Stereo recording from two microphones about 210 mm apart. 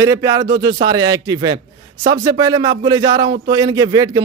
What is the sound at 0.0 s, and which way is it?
A man's voice, 15° right (ahead or behind).